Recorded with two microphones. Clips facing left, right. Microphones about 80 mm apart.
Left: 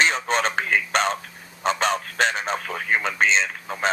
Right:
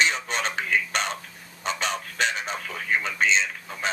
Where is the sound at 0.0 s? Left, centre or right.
Left.